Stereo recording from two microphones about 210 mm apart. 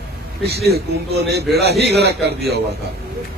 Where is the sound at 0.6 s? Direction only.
50° right (ahead or behind).